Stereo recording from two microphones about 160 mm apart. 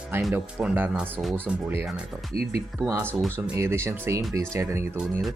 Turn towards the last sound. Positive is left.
turn(degrees=-15)  # may be behind; listen again after turning